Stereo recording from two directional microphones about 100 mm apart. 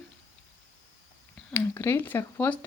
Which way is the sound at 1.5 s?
20° left (ahead or behind).